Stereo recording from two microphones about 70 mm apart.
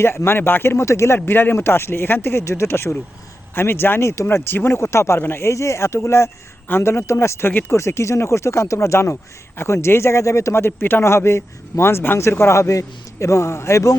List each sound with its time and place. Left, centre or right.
0.0 s a man's voice: left
4.1 s speech: left
4.4 s a man's voice: left